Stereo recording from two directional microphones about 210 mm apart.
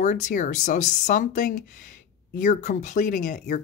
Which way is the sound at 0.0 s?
35° left (ahead or behind).